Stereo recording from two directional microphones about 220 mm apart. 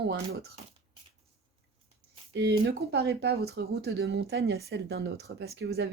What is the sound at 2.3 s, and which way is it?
Speech, 50° right (ahead or behind).